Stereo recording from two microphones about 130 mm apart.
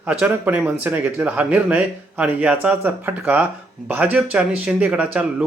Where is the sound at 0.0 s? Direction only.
10° right (ahead or behind).